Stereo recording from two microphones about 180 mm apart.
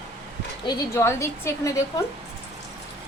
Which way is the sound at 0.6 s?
15° left (ahead or behind).